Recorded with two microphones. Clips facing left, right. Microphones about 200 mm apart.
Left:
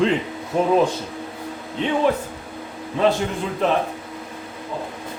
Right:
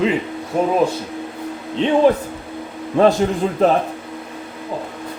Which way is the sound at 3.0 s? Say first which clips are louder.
Right 5 dB; 50° right (ahead or behind).